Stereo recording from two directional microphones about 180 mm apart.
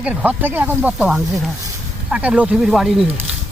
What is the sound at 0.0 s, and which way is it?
Speech, 5° right (ahead or behind).